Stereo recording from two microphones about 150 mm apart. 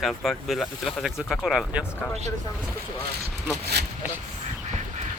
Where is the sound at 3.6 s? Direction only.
90° right.